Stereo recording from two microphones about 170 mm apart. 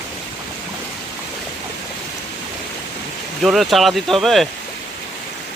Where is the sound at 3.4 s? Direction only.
Centre (ahead or behind).